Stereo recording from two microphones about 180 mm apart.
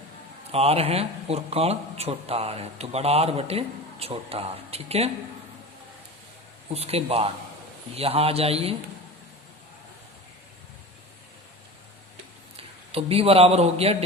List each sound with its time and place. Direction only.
0.5 s speech: 35° right (ahead or behind)
6.7 s speech: 35° right (ahead or behind)
12.9 s speech: 35° right (ahead or behind)